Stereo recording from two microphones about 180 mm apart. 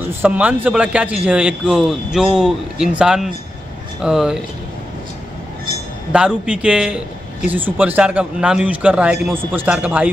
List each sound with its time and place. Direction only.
0.0 s a man's voice: 10° right (ahead or behind)
6.1 s a man's voice: 5° right (ahead or behind)